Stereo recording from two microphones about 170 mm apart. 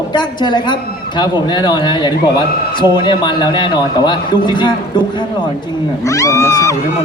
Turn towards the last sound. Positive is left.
turn(degrees=20)  # may be behind; listen again after turning